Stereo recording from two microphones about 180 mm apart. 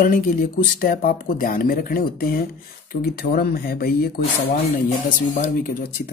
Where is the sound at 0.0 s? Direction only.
50° left (ahead or behind).